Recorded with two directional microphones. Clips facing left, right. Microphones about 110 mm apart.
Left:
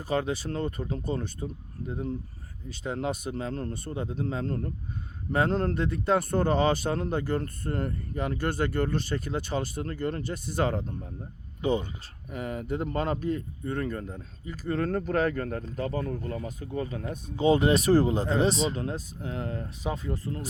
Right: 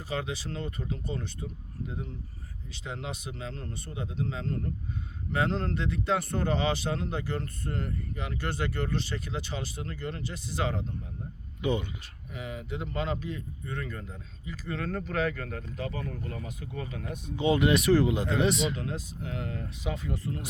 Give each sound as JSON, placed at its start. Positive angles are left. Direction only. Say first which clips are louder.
{"t": 0.0, "sound": "speech", "louder": "left 6 dB", "side_deg": 45}
{"t": 2.6, "sound": "speech", "louder": "left 7 dB", "side_deg": 45}
{"t": 12.3, "sound": "speech", "louder": "left 5 dB", "side_deg": 45}